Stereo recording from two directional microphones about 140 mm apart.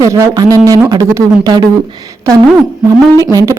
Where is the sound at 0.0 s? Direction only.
25° right (ahead or behind).